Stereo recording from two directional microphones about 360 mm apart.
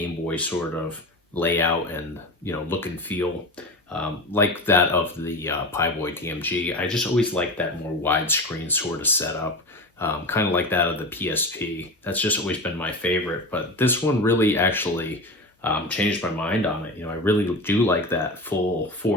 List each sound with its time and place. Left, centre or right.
0.0 s a sound: centre
1.4 s speech: centre
19.0 s speech: left